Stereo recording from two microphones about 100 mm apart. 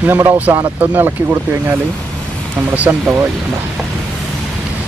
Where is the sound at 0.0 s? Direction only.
15° right (ahead or behind).